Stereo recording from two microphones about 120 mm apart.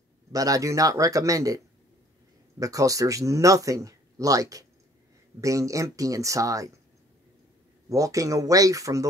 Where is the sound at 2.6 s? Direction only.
30° right (ahead or behind).